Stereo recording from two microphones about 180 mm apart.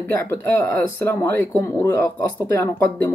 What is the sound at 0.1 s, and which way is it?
Speech, 15° left (ahead or behind).